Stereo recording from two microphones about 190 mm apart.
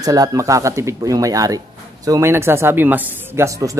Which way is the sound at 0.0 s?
20° right (ahead or behind).